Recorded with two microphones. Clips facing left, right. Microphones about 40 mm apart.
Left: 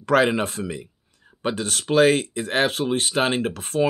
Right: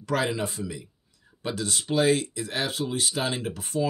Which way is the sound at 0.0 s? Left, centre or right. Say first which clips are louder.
Left 8 dB; left.